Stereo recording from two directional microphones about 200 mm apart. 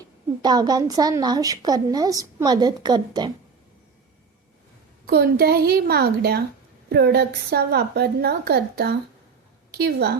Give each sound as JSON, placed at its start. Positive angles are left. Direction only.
{"t": 0.0, "sound": "a woman's voice", "side_deg": -20}
{"t": 5.0, "sound": "a woman's voice", "side_deg": -50}